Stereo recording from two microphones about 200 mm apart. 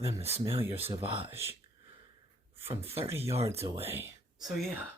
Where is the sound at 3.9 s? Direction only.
10° right (ahead or behind).